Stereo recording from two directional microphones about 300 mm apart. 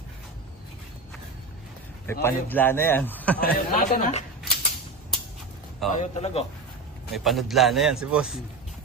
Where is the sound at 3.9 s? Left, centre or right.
Left.